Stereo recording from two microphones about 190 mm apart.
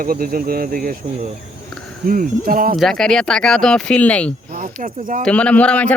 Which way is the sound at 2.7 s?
Centre (ahead or behind).